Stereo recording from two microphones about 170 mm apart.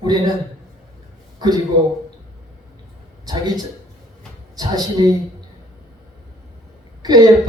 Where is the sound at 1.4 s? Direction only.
25° right (ahead or behind).